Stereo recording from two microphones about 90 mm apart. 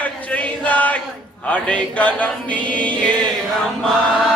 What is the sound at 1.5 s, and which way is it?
Chant, 15° left (ahead or behind).